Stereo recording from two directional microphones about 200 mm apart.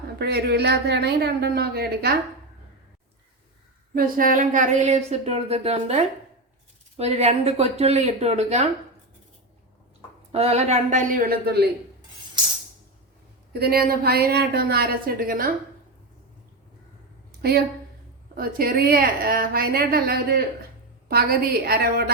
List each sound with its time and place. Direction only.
0.2 s a woman's voice: 55° right (ahead or behind)
3.9 s speech: 45° right (ahead or behind)
10.3 s speech: 30° right (ahead or behind); by 11.6 s 50° right (ahead or behind)
13.5 s a woman's voice: 50° right (ahead or behind)
17.4 s a woman's voice: 50° right (ahead or behind)